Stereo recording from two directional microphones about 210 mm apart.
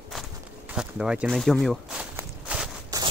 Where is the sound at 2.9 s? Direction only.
15° right (ahead or behind).